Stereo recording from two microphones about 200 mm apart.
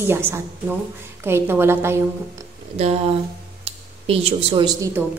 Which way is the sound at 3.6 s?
30° right (ahead or behind).